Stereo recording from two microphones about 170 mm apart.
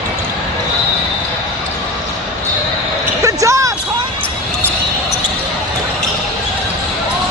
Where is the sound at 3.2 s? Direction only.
20° right (ahead or behind).